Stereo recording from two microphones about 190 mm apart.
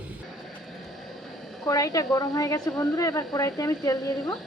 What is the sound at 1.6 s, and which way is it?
A woman's voice, 20° left (ahead or behind).